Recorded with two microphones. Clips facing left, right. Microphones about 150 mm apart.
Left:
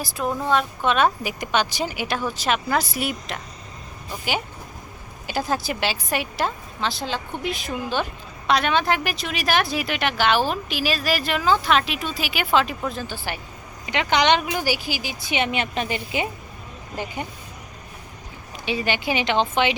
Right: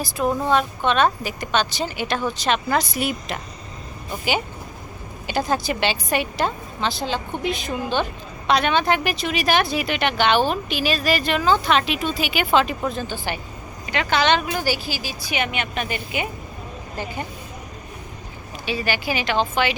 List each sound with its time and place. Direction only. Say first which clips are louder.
0.0 s a woman's voice: right 3 dB; 5° right (ahead or behind)
5.2 s a woman's voice: right 2 dB; centre (ahead or behind)
13.8 s speech: even; 20° left (ahead or behind)
17.0 s speech: even; 15° left (ahead or behind)
18.6 s speech: even; 20° left (ahead or behind)